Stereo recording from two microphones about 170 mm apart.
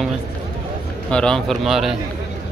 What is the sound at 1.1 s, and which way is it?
Speech, 5° left (ahead or behind).